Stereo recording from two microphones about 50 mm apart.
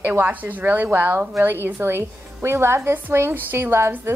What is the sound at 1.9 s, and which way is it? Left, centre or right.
A woman's voice, right.